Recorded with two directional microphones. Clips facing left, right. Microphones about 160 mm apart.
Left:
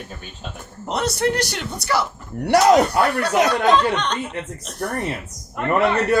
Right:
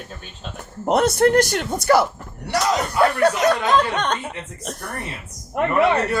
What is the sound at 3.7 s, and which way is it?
A man's voice, 50° right (ahead or behind).